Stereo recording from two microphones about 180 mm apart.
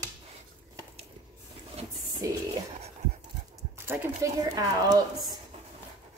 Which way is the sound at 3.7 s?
10° right (ahead or behind).